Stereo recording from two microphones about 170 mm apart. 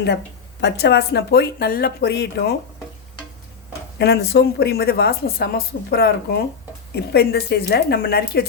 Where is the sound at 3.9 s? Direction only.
85° left.